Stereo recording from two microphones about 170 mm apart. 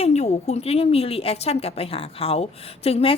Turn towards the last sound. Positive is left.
turn(degrees=35)  # may be behind; listen again after turning